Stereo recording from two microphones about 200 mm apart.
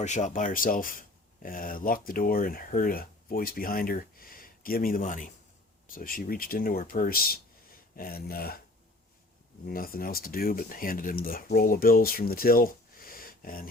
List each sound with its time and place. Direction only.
0.0 s speech: 35° left (ahead or behind)
9.6 s speech: 45° left (ahead or behind)